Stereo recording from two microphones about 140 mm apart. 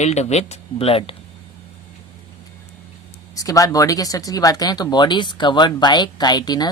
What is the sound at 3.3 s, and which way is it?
Speech, 25° left (ahead or behind).